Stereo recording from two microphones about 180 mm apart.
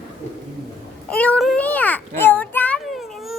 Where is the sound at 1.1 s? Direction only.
5° left (ahead or behind).